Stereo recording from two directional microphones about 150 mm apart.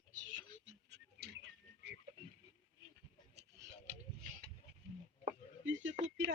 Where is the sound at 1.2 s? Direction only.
90° right.